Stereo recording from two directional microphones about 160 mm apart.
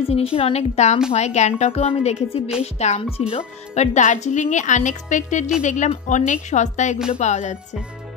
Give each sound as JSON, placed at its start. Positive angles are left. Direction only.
{"t": 0.0, "sound": "a woman's voice", "side_deg": 35}